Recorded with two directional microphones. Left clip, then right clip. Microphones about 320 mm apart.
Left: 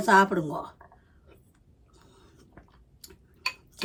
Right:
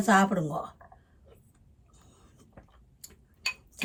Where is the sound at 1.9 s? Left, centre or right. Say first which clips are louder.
Left 3 dB; centre.